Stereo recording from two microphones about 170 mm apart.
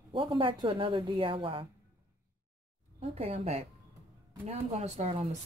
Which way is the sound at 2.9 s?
40° right (ahead or behind).